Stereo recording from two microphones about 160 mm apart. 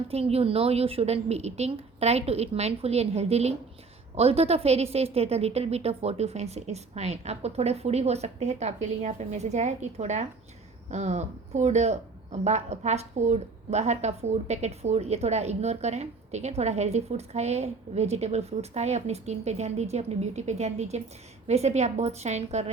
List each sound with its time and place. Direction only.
0.1 s a woman's voice: 40° right (ahead or behind)